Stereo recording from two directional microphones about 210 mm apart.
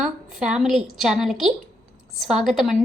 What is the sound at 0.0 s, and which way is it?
A woman's voice, 5° right (ahead or behind).